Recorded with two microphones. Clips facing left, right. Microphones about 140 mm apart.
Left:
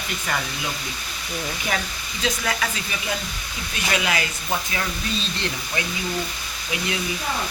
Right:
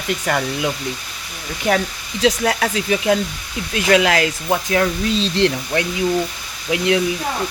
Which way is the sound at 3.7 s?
85° right.